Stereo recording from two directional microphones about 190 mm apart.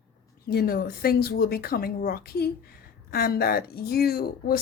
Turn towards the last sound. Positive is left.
turn(degrees=55)  # may be behind; listen again after turning